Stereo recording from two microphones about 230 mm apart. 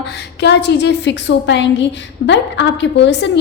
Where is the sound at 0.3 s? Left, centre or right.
Left.